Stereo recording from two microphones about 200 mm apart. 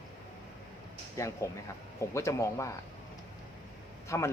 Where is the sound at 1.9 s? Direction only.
15° left (ahead or behind).